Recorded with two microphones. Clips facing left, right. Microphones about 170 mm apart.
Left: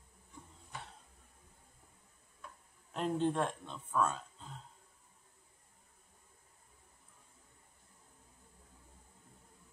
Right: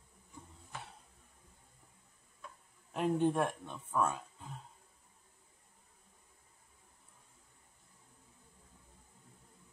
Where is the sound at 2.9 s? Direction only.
10° right (ahead or behind).